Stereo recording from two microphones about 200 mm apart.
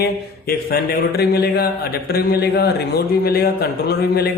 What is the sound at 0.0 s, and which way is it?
Speech, 50° left (ahead or behind).